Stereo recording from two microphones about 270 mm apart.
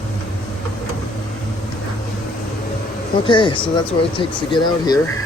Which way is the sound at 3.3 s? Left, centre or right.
Centre.